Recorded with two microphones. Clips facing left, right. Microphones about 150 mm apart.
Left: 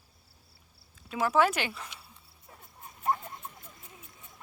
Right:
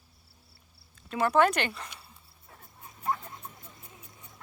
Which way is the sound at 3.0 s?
25° left (ahead or behind).